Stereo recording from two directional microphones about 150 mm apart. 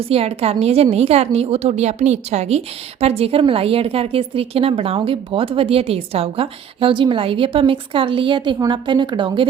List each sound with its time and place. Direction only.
0.0 s a woman's voice: 40° right (ahead or behind)